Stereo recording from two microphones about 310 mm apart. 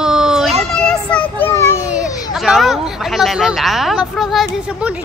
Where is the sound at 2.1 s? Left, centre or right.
Centre.